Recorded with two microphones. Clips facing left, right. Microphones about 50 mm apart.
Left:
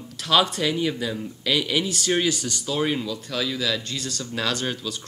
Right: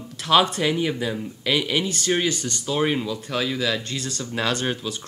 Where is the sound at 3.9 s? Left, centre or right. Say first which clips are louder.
Right 1 dB; centre.